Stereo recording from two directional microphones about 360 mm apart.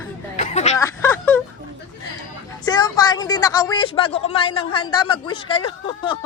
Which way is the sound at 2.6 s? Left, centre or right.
Centre.